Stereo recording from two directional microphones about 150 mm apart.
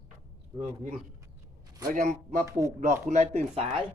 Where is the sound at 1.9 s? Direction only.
55° right (ahead or behind).